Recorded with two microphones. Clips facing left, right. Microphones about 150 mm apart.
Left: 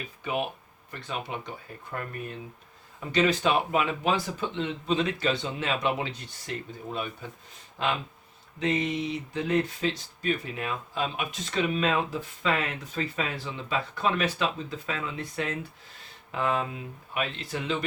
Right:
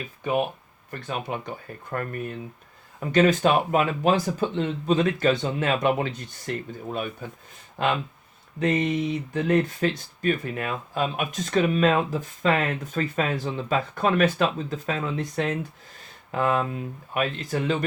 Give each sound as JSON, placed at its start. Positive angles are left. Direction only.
{"t": 0.9, "sound": "speech", "side_deg": -50}
{"t": 3.1, "sound": "speech", "side_deg": -50}